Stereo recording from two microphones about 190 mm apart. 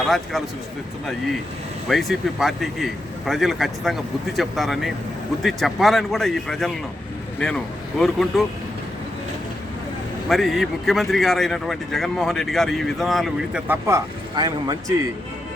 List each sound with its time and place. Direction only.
1.9 s speech: centre (ahead or behind)
10.2 s speech: centre (ahead or behind)
13.8 s speech: 15° right (ahead or behind)